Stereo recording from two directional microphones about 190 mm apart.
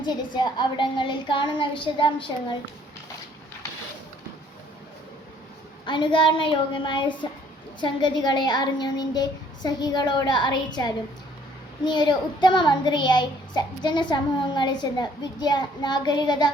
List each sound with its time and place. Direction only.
0.0 s a child's voice: 25° left (ahead or behind)
5.8 s a child's voice: 25° left (ahead or behind)